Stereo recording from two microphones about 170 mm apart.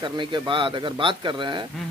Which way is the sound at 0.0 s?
25° right (ahead or behind).